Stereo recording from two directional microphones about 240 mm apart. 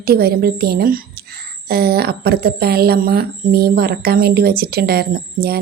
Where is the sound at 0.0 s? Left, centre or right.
Right.